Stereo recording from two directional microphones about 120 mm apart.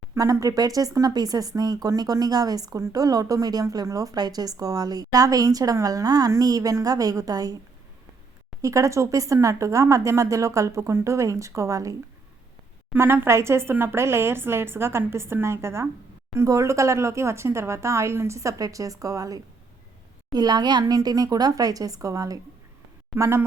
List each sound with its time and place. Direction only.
0.1 s speech: 30° right (ahead or behind)
8.6 s a woman's voice: 25° right (ahead or behind)